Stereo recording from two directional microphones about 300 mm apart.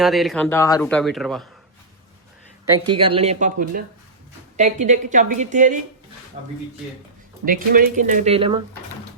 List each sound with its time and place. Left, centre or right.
0.0 s speech: centre
2.6 s a woman's voice: centre
7.4 s a woman's voice: right